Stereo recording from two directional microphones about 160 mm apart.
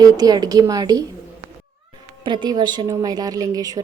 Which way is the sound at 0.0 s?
25° right (ahead or behind).